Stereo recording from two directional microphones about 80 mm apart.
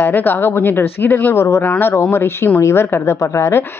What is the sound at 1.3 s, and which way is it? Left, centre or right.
A woman's voice, left.